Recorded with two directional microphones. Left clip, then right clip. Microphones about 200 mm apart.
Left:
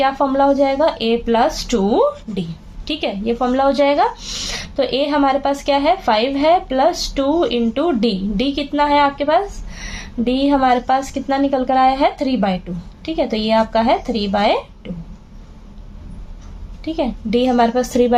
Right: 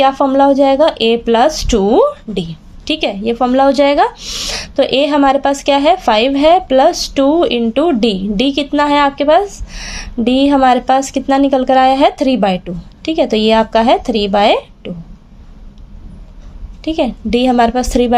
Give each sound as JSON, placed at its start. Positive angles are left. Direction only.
{"t": 0.0, "sound": "speech", "side_deg": -40}
{"t": 16.8, "sound": "speech", "side_deg": -45}